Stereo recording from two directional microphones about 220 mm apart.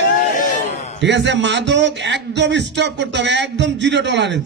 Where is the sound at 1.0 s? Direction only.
55° right (ahead or behind).